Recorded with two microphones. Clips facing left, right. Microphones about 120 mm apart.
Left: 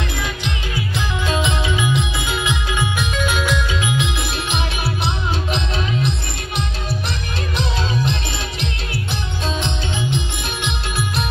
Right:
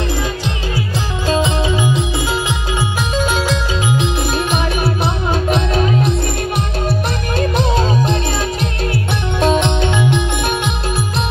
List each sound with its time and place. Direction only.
0.7 s music: 35° right (ahead or behind)
9.4 s music: 60° right (ahead or behind)